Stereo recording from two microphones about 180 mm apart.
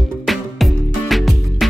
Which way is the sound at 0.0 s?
Centre (ahead or behind).